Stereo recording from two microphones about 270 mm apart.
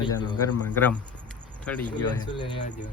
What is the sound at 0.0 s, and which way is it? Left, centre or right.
Speech, centre.